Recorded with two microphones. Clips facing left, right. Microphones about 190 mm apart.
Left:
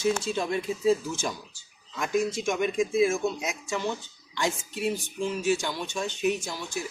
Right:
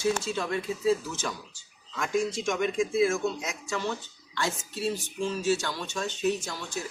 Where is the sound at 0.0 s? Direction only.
20° left (ahead or behind).